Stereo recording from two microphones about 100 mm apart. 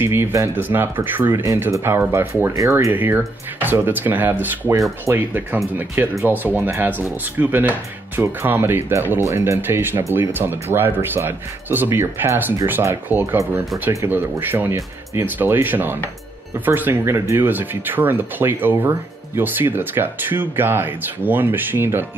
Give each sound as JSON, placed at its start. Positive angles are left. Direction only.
{"t": 0.0, "sound": "speech", "side_deg": -25}
{"t": 2.9, "sound": "speech", "side_deg": -20}